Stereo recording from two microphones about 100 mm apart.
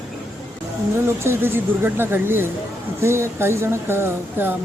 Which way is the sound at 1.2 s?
25° right (ahead or behind).